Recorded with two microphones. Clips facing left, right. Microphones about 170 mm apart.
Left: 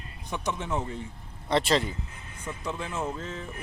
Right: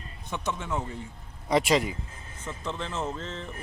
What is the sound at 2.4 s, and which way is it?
Speech, 25° right (ahead or behind).